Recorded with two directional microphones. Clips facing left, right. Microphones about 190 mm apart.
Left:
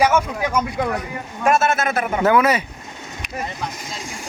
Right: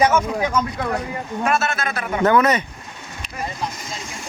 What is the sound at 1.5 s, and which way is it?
Speech, 50° left (ahead or behind).